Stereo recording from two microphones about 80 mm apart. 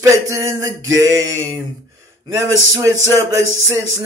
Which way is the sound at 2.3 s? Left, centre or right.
Right.